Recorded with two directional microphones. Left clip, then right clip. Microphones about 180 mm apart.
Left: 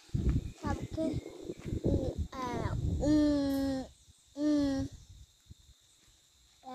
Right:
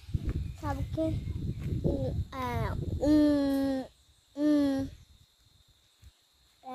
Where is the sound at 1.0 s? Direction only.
20° right (ahead or behind).